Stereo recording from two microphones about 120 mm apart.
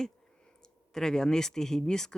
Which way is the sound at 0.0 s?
5° left (ahead or behind).